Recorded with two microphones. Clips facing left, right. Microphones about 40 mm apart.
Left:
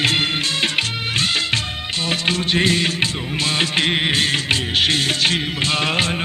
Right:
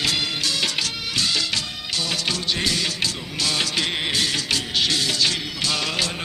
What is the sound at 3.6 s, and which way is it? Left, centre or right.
Music, left.